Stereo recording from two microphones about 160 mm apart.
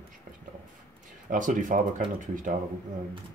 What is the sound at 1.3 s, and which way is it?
Speech, 55° right (ahead or behind).